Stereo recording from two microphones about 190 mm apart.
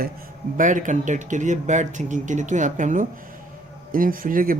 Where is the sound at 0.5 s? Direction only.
45° right (ahead or behind).